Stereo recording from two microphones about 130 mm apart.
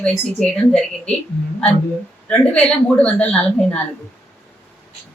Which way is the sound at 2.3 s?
10° left (ahead or behind).